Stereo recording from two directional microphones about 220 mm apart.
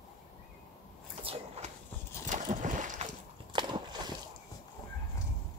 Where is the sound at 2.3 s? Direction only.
35° right (ahead or behind).